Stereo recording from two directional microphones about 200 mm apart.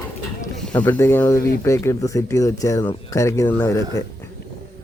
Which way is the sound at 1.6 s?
15° left (ahead or behind).